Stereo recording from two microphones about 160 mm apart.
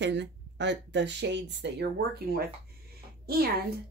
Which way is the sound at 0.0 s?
90° right.